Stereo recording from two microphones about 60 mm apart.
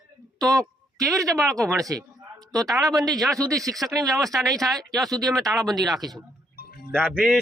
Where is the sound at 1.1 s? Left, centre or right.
Right.